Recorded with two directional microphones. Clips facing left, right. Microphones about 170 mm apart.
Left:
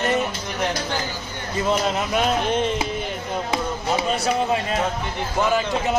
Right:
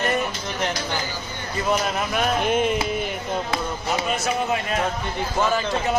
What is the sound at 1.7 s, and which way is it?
Speech, 25° left (ahead or behind).